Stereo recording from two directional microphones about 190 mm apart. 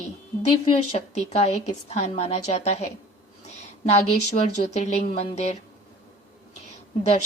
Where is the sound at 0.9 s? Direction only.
35° left (ahead or behind).